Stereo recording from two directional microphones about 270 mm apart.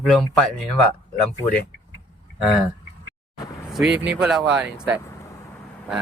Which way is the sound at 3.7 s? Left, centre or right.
Centre.